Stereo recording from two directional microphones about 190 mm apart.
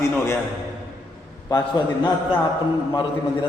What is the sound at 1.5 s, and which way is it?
Speech, 25° left (ahead or behind).